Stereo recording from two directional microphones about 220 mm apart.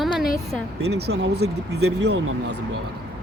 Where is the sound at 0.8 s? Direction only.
50° right (ahead or behind).